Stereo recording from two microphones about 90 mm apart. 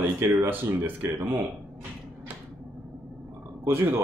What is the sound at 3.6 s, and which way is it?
Speech, 25° right (ahead or behind).